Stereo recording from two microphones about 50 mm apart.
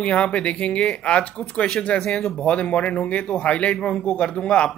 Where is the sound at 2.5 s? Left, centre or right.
Left.